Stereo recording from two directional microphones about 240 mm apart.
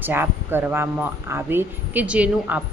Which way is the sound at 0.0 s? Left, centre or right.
Centre.